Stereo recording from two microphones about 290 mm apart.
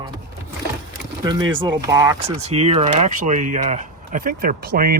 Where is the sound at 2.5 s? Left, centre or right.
Right.